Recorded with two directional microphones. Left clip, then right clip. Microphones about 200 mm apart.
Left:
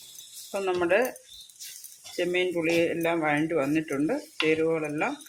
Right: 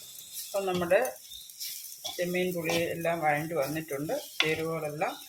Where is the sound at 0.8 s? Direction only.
55° left (ahead or behind).